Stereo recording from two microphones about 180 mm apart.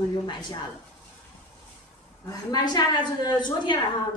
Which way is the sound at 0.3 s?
25° left (ahead or behind).